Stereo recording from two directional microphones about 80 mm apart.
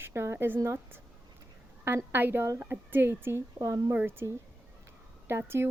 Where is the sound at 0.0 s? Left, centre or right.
Right.